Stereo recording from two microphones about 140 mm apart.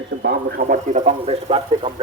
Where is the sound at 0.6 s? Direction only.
65° right (ahead or behind); by 2.0 s 40° right (ahead or behind).